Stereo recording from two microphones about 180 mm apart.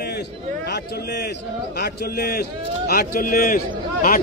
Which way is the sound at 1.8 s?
60° left (ahead or behind).